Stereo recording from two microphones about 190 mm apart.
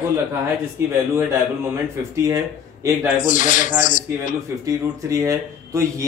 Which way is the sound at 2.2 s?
15° right (ahead or behind).